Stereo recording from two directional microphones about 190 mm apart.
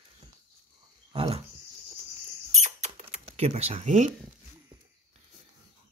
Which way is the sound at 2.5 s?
35° right (ahead or behind).